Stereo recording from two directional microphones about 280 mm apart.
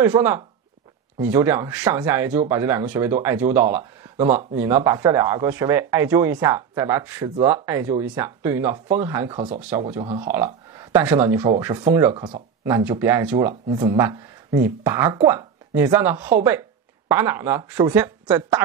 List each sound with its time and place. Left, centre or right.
0.0 s speech: centre
9.6 s speech: centre
9.8 s speech: right
10.2 s speech: centre
13.5 s speech: right
13.8 s speech: centre